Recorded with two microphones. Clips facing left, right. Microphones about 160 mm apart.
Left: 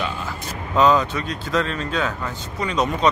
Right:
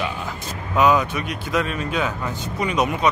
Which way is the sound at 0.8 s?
10° right (ahead or behind).